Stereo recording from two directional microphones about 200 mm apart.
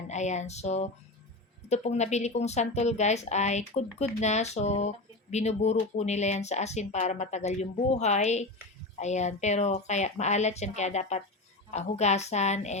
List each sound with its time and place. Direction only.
0.1 s speech: 35° left (ahead or behind)